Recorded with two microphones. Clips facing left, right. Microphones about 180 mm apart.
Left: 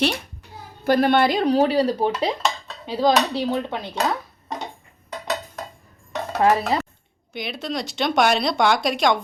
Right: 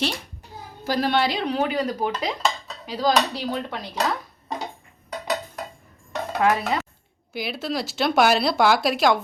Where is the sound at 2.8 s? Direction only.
25° left (ahead or behind).